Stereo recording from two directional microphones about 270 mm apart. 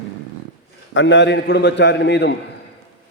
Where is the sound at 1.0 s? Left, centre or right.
Left.